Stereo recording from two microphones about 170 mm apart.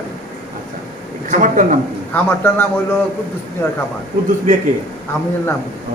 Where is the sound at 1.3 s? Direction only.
50° right (ahead or behind).